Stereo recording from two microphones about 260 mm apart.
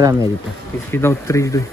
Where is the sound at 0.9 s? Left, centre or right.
Centre.